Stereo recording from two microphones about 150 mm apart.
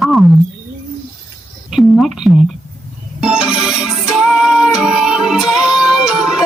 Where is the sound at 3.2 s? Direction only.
5° right (ahead or behind).